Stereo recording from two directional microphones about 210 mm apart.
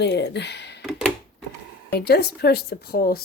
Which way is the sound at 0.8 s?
5° right (ahead or behind).